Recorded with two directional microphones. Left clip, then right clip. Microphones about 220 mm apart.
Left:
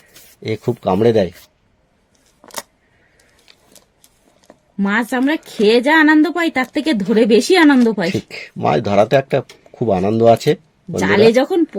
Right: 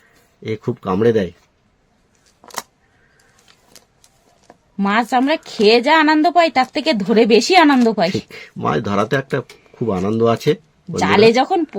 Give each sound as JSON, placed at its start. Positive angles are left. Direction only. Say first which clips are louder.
{"t": 0.4, "sound": "speech", "louder": "left 4 dB", "side_deg": 15}
{"t": 2.4, "sound": "a sound", "louder": "right 1 dB", "side_deg": -5}
{"t": 4.8, "sound": "speech", "louder": "right 2 dB", "side_deg": -20}
{"t": 8.3, "sound": "speech", "louder": "left 3 dB", "side_deg": 15}
{"t": 11.0, "sound": "speech", "louder": "even", "side_deg": -20}